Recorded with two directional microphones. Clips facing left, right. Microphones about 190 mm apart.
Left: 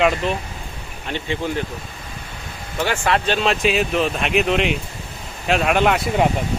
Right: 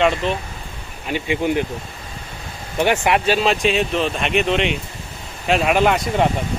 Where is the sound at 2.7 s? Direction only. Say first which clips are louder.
Right 3 dB; 20° right (ahead or behind).